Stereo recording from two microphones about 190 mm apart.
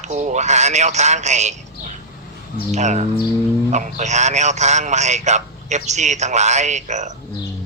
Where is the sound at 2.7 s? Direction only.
40° right (ahead or behind).